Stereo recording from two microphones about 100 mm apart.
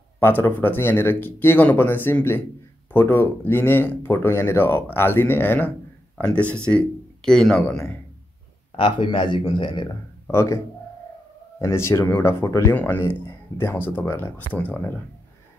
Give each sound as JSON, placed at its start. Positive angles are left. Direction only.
{"t": 0.2, "sound": "speech", "side_deg": 25}
{"t": 8.7, "sound": "speech", "side_deg": 55}
{"t": 10.3, "sound": "speech", "side_deg": 30}
{"t": 11.6, "sound": "speech", "side_deg": 30}